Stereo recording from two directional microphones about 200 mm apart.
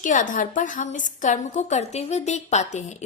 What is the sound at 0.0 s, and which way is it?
A woman's voice, 40° left (ahead or behind).